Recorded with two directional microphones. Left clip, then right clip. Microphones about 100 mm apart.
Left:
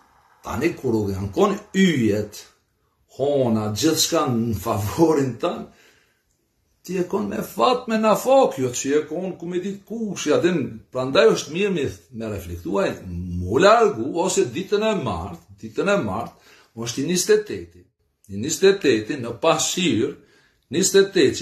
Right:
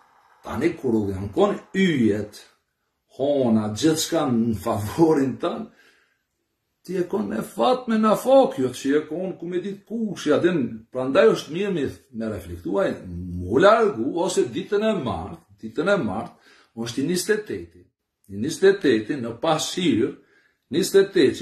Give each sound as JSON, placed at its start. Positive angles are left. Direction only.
{"t": 0.4, "sound": "speech", "side_deg": -30}
{"t": 6.8, "sound": "a man's voice", "side_deg": -30}